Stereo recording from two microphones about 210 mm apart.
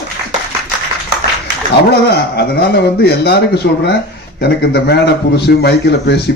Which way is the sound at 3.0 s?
50° left (ahead or behind).